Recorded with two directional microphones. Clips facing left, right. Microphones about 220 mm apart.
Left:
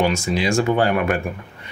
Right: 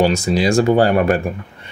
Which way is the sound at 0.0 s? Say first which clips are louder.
Right 4 dB; 35° right (ahead or behind).